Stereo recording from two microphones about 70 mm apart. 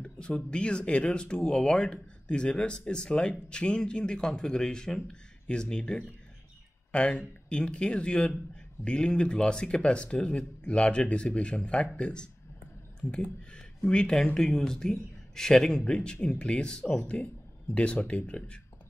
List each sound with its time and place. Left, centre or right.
0.3 s speech: centre